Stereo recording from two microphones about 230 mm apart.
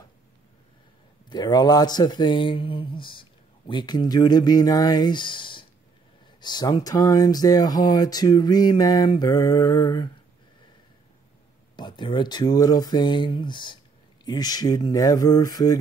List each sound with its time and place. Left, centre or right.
1.3 s speech: centre
11.7 s speech: centre